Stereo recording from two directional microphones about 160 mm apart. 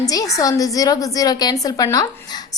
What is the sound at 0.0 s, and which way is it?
A woman's voice, 20° left (ahead or behind).